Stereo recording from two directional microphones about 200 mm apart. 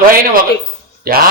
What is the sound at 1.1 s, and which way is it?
Speech, 45° right (ahead or behind).